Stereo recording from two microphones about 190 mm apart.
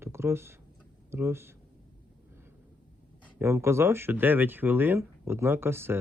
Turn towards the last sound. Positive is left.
turn(degrees=-10)  # may be behind; listen again after turning